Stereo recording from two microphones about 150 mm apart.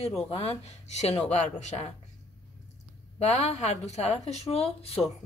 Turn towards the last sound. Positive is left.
turn(degrees=40)  # may be behind; listen again after turning